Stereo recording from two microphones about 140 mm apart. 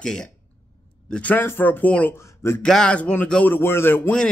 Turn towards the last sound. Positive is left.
turn(degrees=10)  # may be behind; listen again after turning